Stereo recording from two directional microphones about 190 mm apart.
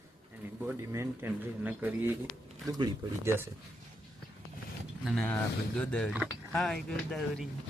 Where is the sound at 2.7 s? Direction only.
20° right (ahead or behind).